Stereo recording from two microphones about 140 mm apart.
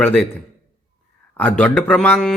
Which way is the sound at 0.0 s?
10° left (ahead or behind).